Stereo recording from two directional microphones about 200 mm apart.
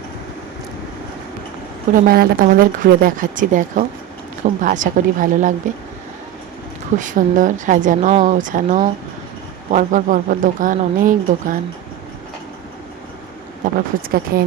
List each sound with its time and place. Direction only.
1.9 s speech: 45° right (ahead or behind)
7.0 s speech: 40° right (ahead or behind)
13.7 s speech: 45° right (ahead or behind)